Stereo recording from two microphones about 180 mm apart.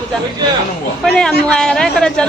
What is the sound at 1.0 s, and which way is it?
A child's voice, 5° left (ahead or behind).